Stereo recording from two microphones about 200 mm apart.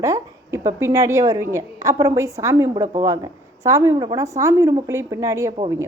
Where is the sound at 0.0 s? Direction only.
15° right (ahead or behind).